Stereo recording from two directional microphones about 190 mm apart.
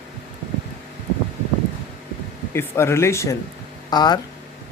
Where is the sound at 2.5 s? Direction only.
15° left (ahead or behind).